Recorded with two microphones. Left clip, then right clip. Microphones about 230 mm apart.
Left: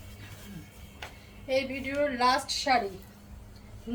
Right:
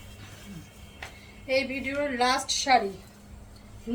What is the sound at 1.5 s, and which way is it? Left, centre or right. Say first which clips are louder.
A woman's voice: right 2 dB; centre.